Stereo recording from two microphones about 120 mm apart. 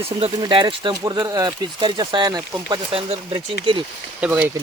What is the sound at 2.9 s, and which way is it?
Speech, 50° right (ahead or behind).